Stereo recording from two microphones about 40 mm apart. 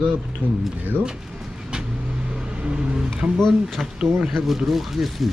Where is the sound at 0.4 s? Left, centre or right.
Right.